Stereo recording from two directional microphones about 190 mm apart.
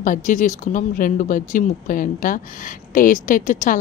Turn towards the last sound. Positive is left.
turn(degrees=45)  # may be behind; listen again after turning